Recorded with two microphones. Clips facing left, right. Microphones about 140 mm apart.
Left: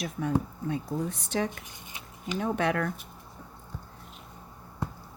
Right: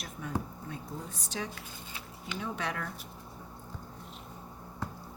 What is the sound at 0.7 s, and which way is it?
Speech, 65° left (ahead or behind).